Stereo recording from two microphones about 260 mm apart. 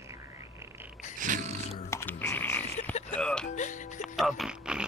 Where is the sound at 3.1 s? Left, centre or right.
Centre.